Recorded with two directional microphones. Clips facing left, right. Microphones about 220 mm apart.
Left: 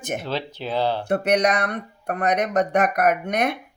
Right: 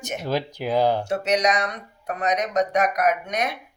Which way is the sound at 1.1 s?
55° left (ahead or behind).